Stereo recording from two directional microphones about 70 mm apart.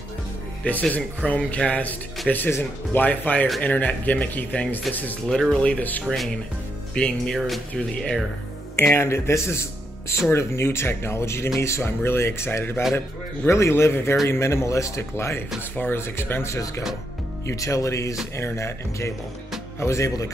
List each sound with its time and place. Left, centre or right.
0.7 s speech: left
5.3 s speech: centre
6.0 s speech: centre
6.9 s speech: centre
7.3 s speech: centre
8.7 s speech: left
17.5 s speech: left